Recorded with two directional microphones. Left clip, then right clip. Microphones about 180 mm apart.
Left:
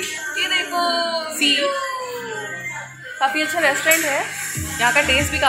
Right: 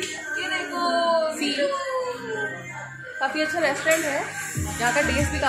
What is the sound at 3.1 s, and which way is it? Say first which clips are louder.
A woman's voice: left 5 dB; 20° left (ahead or behind).